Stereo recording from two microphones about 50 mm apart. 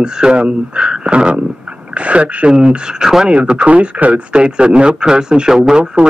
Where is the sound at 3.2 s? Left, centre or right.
Right.